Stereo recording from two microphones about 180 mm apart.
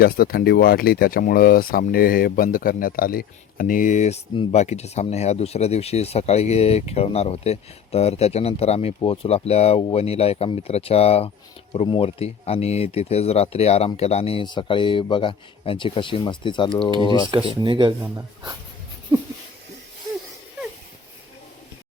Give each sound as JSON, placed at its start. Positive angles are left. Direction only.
{"t": 0.0, "sound": "speech", "side_deg": 55}
{"t": 17.3, "sound": "speech", "side_deg": -25}